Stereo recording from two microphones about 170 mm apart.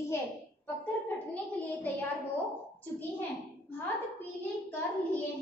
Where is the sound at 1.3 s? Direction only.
10° left (ahead or behind).